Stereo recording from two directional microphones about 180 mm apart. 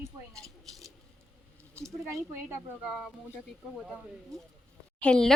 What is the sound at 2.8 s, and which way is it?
Speech, 5° right (ahead or behind).